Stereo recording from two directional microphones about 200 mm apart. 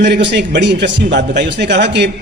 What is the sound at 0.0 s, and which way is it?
A man's voice, 60° right (ahead or behind).